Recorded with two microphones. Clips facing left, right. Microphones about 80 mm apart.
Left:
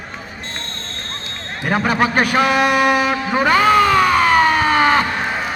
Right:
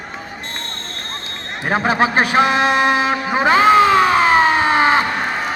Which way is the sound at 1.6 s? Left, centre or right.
Right.